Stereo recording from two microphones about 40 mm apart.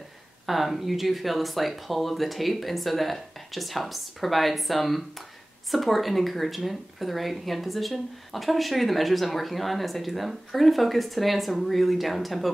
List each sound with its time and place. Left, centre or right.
0.5 s speech: centre